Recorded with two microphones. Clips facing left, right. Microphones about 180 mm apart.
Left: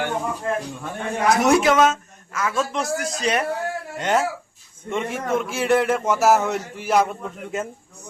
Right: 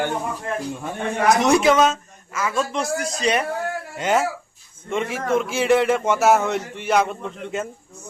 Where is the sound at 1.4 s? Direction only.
Centre (ahead or behind).